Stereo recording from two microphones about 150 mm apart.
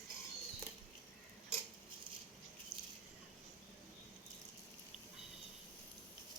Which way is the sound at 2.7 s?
90° right.